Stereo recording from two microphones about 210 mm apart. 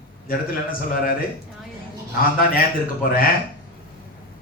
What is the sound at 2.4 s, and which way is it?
Speech, 45° left (ahead or behind).